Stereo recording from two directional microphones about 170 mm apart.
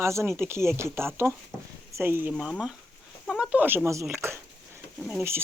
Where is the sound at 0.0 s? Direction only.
15° right (ahead or behind).